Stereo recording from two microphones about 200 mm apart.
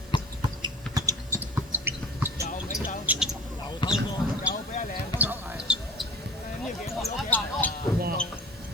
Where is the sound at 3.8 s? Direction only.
25° left (ahead or behind).